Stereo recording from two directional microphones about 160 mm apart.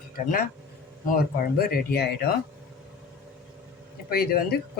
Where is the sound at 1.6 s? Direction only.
70° left (ahead or behind).